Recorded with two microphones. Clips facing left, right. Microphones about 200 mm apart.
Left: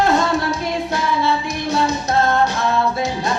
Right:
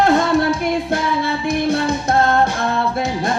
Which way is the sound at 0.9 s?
55° right (ahead or behind).